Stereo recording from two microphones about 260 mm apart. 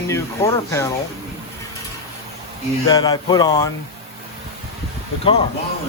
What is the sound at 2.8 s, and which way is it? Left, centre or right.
Speech, centre.